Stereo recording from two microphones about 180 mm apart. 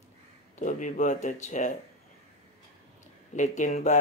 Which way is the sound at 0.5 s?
45° left (ahead or behind).